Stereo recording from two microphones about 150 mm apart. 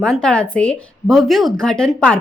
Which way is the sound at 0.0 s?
5° left (ahead or behind).